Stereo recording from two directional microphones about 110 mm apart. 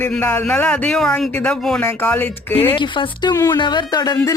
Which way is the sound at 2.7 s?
45° left (ahead or behind).